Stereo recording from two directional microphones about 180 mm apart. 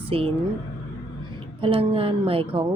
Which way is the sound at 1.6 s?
30° right (ahead or behind).